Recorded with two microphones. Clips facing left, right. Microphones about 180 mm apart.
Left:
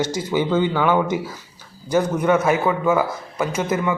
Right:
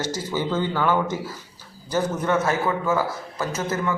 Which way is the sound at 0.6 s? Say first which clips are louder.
Left 3 dB; 15° left (ahead or behind).